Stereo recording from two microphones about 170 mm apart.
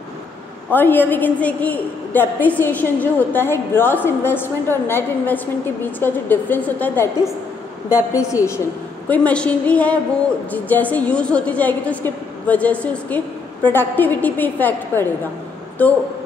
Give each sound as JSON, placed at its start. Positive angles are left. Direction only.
{"t": 0.7, "sound": "a woman's voice", "side_deg": 10}
{"t": 8.1, "sound": "a woman's voice", "side_deg": 20}
{"t": 9.1, "sound": "a woman's voice", "side_deg": 5}